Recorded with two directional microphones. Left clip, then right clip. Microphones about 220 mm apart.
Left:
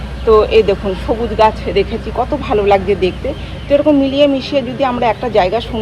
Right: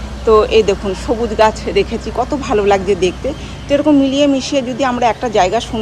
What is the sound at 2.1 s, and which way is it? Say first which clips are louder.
Speech: left 1 dB; 30° right (ahead or behind).